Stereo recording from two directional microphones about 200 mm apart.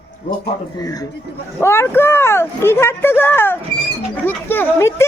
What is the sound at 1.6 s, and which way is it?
A woman's voice, 10° left (ahead or behind).